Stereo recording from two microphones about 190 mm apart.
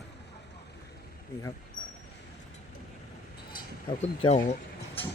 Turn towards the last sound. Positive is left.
turn(degrees=30)  # may be behind; listen again after turning